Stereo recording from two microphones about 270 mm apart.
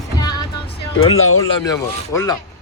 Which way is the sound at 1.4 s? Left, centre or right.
Centre.